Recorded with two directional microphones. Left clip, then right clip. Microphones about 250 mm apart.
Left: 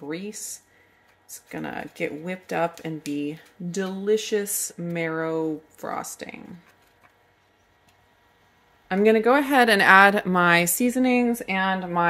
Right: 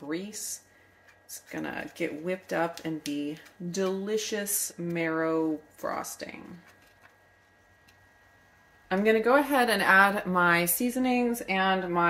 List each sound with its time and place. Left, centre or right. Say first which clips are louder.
1.5 s speech: left 3 dB; left
8.8 s a woman's voice: left 5 dB; left